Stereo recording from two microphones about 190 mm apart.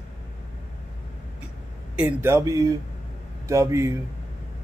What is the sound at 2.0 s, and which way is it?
A man's voice, 10° right (ahead or behind).